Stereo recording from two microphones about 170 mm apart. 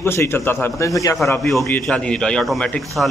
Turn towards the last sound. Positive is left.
turn(degrees=5)  # may be behind; listen again after turning